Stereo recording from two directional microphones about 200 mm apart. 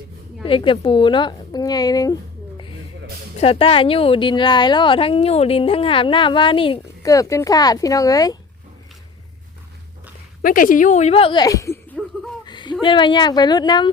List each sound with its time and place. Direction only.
0.4 s a woman's voice: 25° left (ahead or behind)
3.4 s a woman's voice: 30° left (ahead or behind)
10.4 s a woman's voice: 45° left (ahead or behind); by 11.9 s 15° left (ahead or behind)
12.5 s a sound: 20° left (ahead or behind)
12.8 s a woman's voice: 25° left (ahead or behind)